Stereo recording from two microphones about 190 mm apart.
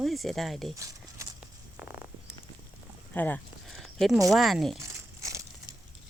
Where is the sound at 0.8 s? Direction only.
15° right (ahead or behind).